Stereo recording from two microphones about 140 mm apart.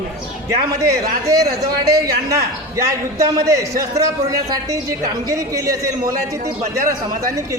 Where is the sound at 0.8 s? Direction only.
25° right (ahead or behind).